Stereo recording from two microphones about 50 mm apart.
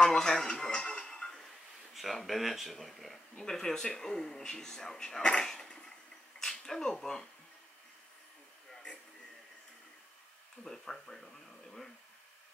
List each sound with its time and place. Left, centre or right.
0.0 s television: centre
2.0 s speech: centre
10.6 s speech: centre